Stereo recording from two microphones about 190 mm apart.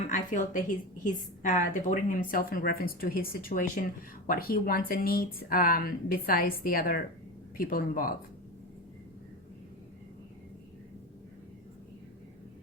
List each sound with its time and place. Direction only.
0.1 s a woman's voice: 40° left (ahead or behind)